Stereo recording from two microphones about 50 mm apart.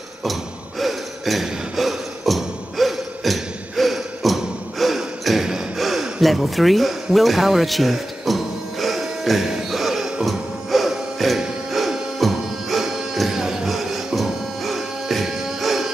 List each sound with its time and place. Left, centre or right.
0.2 s a sound: centre
5.8 s gasp: centre
6.2 s speech: centre
7.2 s music: centre